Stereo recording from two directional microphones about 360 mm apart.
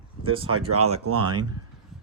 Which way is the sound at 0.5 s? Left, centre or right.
Right.